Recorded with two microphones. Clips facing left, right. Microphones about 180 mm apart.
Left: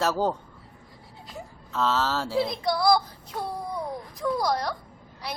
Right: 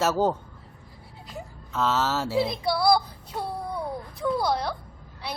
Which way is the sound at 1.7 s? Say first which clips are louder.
Even; 5° right (ahead or behind).